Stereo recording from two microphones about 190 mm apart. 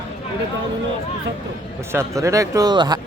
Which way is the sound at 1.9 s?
15° right (ahead or behind).